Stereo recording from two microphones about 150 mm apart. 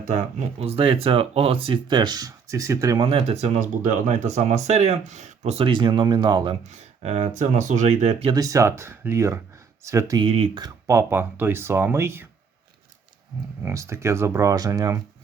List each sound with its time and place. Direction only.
0.0 s speech: 50° right (ahead or behind); by 3.1 s 25° right (ahead or behind)
3.1 s speech: 40° right (ahead or behind)
6.7 s speech: 50° right (ahead or behind)
8.3 s speech: 25° right (ahead or behind)
10.2 s speech: 40° right (ahead or behind)
10.6 s speech: 20° right (ahead or behind)
13.6 s speech: 20° right (ahead or behind)